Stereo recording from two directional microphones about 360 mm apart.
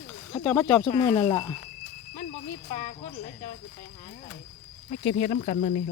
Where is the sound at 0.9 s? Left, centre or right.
Centre.